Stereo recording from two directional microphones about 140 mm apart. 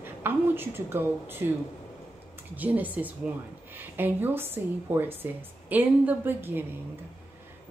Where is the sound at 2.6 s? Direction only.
10° right (ahead or behind).